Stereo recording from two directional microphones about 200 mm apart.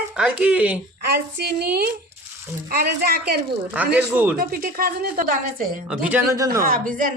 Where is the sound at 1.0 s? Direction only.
55° right (ahead or behind).